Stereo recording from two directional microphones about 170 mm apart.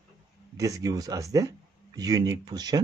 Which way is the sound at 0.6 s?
20° right (ahead or behind).